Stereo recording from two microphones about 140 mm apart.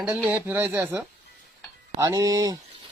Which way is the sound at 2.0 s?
25° right (ahead or behind).